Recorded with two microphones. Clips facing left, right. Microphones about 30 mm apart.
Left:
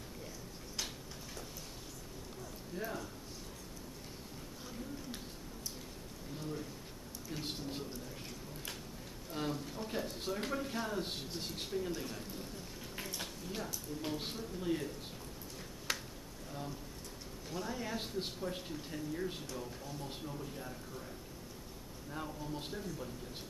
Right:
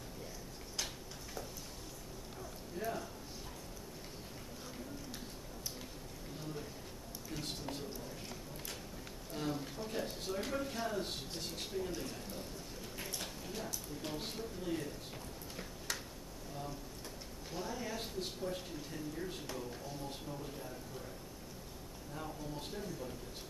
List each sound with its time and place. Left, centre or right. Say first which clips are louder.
2.8 s a man's voice: right 2 dB; centre
9.3 s a sound: left 1 dB; centre
11.7 s speech: left 2 dB; centre
13.6 s speech: left 2 dB; centre
17.6 s speech: left 1 dB; centre
22.1 s speech: left 2 dB; centre